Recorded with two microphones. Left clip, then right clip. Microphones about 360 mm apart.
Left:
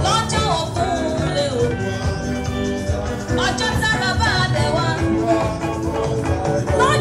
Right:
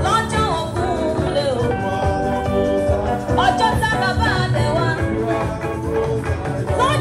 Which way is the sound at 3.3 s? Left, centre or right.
Centre.